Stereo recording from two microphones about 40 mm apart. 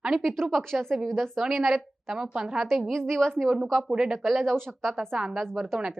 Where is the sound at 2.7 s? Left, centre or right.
Centre.